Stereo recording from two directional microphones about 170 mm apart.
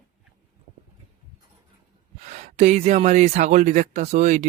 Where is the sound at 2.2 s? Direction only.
40° right (ahead or behind).